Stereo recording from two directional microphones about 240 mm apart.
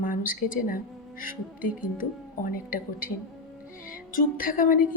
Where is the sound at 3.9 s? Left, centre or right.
Left.